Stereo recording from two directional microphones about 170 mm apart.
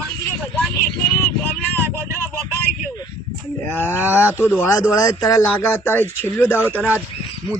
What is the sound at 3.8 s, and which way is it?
Speech, 10° right (ahead or behind).